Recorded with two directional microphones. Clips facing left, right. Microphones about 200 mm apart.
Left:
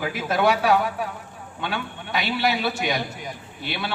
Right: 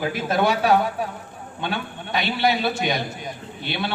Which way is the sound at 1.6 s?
25° right (ahead or behind).